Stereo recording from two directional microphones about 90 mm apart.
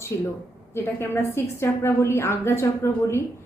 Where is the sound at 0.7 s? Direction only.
25° left (ahead or behind).